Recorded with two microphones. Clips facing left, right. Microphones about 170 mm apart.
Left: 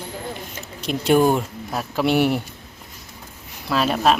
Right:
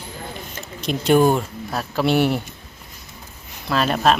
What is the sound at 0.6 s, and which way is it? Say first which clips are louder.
Speech: right 2 dB; 10° left (ahead or behind).